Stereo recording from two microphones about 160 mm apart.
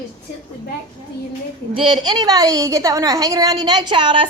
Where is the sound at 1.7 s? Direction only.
30° right (ahead or behind).